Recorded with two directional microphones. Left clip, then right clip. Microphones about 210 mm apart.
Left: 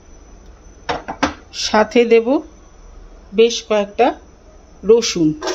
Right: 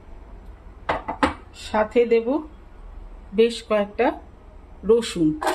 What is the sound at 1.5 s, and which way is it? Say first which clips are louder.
Speech: left 8 dB; 35° left (ahead or behind).